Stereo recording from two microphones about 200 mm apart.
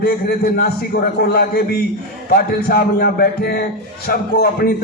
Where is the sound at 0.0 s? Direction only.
50° left (ahead or behind).